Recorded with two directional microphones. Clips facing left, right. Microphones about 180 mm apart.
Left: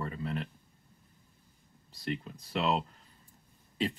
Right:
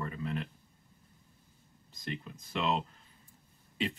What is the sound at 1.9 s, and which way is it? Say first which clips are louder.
Speech: left 4 dB; 35° left (ahead or behind).